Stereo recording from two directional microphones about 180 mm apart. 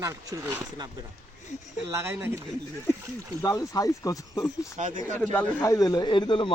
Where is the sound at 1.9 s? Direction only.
15° right (ahead or behind).